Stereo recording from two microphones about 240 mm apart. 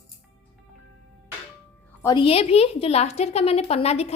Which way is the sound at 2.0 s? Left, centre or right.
Centre.